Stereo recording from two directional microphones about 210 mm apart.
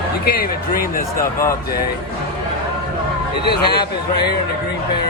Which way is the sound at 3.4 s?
50° left (ahead or behind).